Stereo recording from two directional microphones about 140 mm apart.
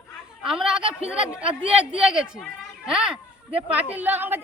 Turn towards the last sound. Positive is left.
turn(degrees=-15)  # may be behind; listen again after turning